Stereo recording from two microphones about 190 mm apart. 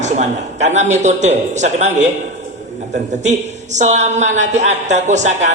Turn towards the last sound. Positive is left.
turn(degrees=-40)  # may be behind; listen again after turning